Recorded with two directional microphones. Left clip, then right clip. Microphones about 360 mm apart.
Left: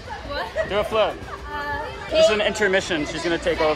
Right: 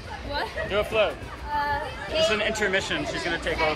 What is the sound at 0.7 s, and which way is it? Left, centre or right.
Speech, left.